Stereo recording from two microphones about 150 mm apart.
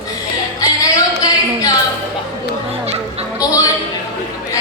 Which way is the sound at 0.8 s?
25° left (ahead or behind).